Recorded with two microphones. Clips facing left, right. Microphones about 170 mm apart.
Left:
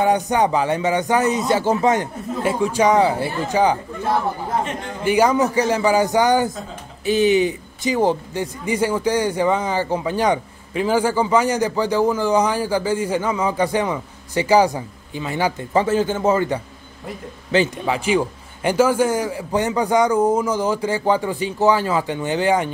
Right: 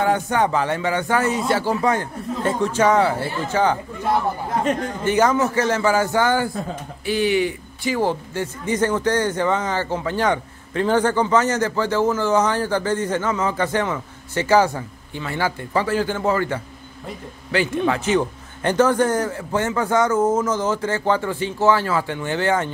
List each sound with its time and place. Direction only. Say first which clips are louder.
0.0 s speech: left 2 dB; 15° left (ahead or behind)
2.4 s speech: left 1 dB; 10° left (ahead or behind)
5.0 s speech: left 2 dB; 10° left (ahead or behind)